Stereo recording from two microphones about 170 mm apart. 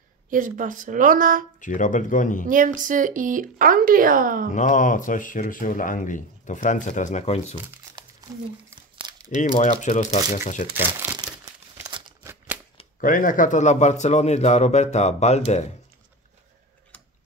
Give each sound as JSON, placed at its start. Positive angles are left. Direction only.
{"t": 0.3, "sound": "speech", "side_deg": -50}
{"t": 1.6, "sound": "speech", "side_deg": 50}
{"t": 2.4, "sound": "speech", "side_deg": -50}
{"t": 4.6, "sound": "speech", "side_deg": 50}
{"t": 9.3, "sound": "speech", "side_deg": 45}
{"t": 11.0, "sound": "crumpling", "side_deg": -10}
{"t": 11.8, "sound": "a sound", "side_deg": -20}
{"t": 13.0, "sound": "speech", "side_deg": 55}